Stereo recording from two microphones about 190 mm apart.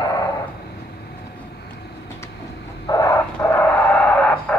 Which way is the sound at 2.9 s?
15° left (ahead or behind).